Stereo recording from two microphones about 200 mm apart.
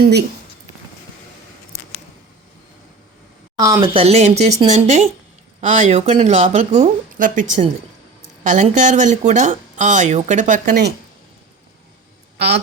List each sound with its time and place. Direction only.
0.0 s speech: 55° right (ahead or behind)
3.6 s speech: 15° right (ahead or behind)
3.9 s speech: 30° right (ahead or behind)
12.4 s a woman's voice: 55° right (ahead or behind)